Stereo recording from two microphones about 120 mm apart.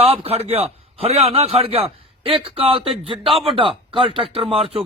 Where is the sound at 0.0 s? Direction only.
55° right (ahead or behind).